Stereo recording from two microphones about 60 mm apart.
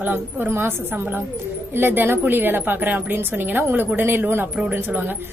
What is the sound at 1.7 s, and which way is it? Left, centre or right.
A woman's voice, right.